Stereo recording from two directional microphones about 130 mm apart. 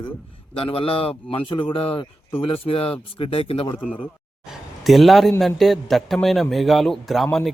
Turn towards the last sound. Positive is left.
turn(degrees=0)  # may be behind; listen again after turning